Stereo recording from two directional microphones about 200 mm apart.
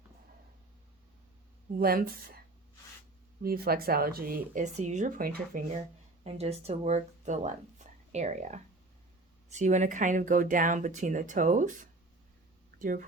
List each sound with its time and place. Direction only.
1.7 s speech: 45° right (ahead or behind)
3.4 s speech: 50° right (ahead or behind)
6.2 s speech: 30° right (ahead or behind)
12.8 s speech: 40° right (ahead or behind)